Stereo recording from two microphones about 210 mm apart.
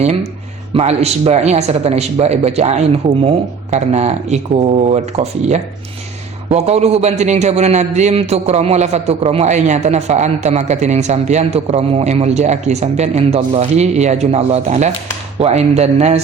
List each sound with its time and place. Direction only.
0.0 s a man's voice: 30° right (ahead or behind)